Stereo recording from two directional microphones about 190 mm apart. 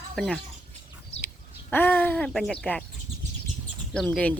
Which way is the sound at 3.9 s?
5° left (ahead or behind).